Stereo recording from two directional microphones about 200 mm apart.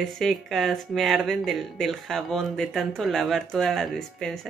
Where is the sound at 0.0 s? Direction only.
Centre (ahead or behind).